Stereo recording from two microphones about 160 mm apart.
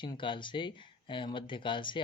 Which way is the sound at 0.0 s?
30° left (ahead or behind).